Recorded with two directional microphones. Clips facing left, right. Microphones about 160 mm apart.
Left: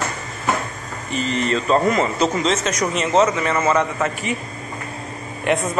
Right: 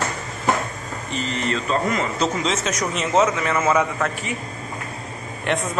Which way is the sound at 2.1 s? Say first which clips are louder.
Left 3 dB; centre (ahead or behind).